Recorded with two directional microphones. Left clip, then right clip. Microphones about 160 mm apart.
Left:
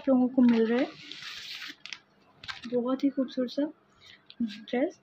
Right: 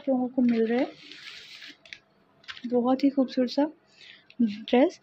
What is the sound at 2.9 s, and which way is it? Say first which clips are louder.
A woman's voice: right 5 dB; 35° right (ahead or behind).